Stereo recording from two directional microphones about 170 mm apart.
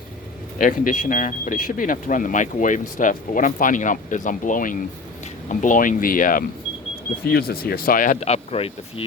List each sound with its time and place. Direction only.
0.6 s speech: 50° left (ahead or behind)
7.3 s speech: 65° left (ahead or behind); by 9.0 s 35° left (ahead or behind)